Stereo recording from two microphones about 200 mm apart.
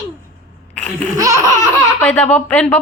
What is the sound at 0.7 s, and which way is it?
Laughter, 5° left (ahead or behind).